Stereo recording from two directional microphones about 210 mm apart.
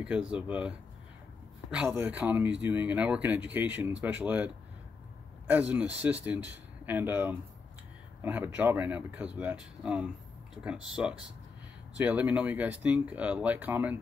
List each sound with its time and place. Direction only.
0.0 s speech: 5° right (ahead or behind)
5.5 s speech: 5° right (ahead or behind)